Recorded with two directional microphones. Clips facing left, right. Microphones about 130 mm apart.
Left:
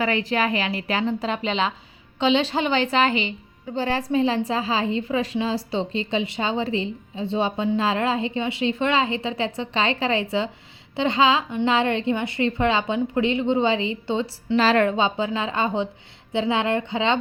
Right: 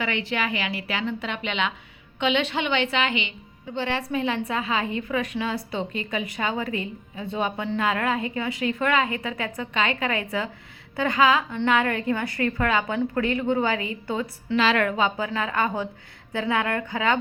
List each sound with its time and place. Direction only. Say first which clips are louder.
0.0 s a woman's voice: left 5 dB; 40° left (ahead or behind)
14.6 s a woman's voice: left 3 dB; 40° left (ahead or behind)
14.8 s a woman's voice: left 2 dB; 25° left (ahead or behind)